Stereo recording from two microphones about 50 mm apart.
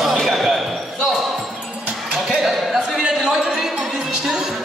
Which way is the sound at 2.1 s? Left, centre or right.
Centre.